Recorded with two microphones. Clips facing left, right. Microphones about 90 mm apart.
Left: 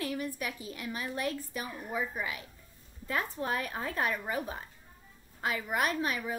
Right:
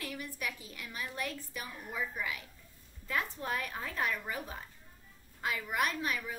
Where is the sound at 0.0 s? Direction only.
20° left (ahead or behind).